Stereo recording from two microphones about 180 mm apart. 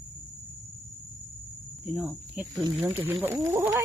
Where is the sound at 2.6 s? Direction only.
30° right (ahead or behind).